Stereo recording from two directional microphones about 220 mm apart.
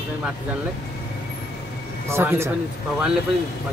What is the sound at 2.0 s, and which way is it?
Speech, 10° right (ahead or behind).